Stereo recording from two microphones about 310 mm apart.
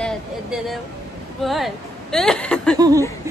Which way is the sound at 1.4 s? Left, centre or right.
Centre.